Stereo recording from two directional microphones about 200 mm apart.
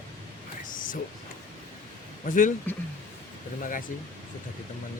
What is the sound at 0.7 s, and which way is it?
Thunder, 45° left (ahead or behind).